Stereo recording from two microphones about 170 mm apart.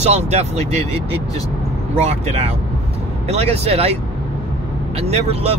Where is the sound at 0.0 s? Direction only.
40° right (ahead or behind).